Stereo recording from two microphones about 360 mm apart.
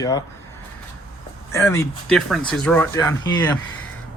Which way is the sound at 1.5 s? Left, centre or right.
Centre.